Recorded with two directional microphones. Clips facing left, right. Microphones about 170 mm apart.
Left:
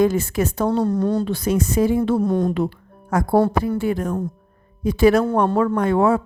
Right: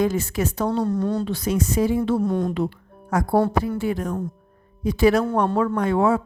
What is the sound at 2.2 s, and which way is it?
Speech, 40° left (ahead or behind).